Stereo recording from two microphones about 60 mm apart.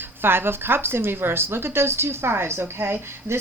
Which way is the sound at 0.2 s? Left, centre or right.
Right.